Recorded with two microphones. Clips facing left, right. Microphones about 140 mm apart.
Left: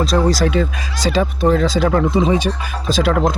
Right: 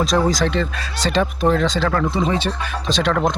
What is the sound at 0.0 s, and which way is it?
A man's voice, centre (ahead or behind).